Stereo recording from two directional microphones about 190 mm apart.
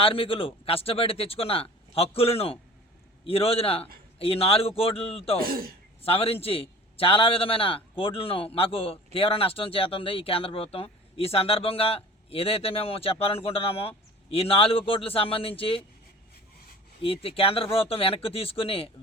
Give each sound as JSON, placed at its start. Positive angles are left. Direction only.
{"t": 0.0, "sound": "a man's voice", "side_deg": 30}
{"t": 5.4, "sound": "speech", "side_deg": -50}
{"t": 6.0, "sound": "speech", "side_deg": 30}
{"t": 17.0, "sound": "speech", "side_deg": 30}